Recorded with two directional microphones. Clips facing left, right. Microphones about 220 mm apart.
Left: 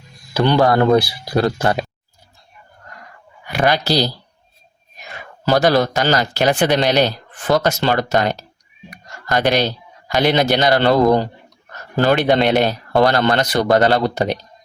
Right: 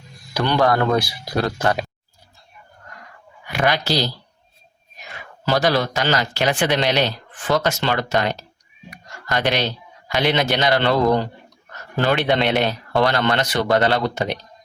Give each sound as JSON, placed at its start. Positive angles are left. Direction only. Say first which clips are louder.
{"t": 0.3, "sound": "speech", "louder": "left 4 dB", "side_deg": 30}
{"t": 3.4, "sound": "speech", "louder": "left 3 dB", "side_deg": 35}
{"t": 5.5, "sound": "speech", "louder": "left 4 dB", "side_deg": 45}